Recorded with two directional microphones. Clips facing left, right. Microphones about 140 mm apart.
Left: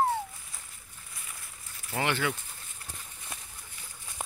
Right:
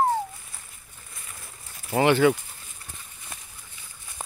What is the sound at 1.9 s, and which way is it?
Speech, 25° right (ahead or behind).